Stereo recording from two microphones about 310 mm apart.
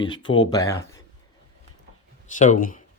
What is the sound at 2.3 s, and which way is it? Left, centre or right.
Speech, left.